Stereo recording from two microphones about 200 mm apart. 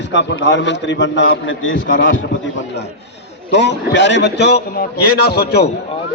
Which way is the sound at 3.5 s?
60° left (ahead or behind).